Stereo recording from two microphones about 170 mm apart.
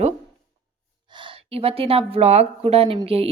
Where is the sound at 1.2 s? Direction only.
35° right (ahead or behind).